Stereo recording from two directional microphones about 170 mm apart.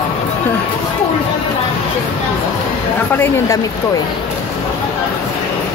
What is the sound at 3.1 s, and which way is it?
Speech, 20° left (ahead or behind).